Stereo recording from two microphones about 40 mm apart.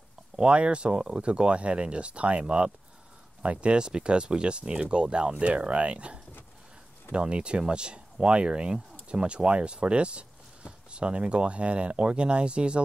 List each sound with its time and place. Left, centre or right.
0.4 s speech: right